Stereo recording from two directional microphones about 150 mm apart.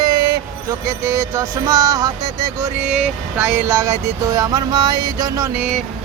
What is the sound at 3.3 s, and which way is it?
Speech, 15° right (ahead or behind).